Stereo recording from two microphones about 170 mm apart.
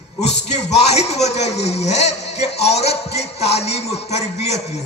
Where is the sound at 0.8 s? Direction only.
40° left (ahead or behind).